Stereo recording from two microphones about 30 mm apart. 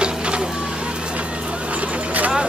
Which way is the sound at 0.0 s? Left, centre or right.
Right.